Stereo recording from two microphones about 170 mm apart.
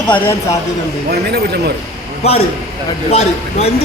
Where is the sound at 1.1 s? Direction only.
70° right (ahead or behind).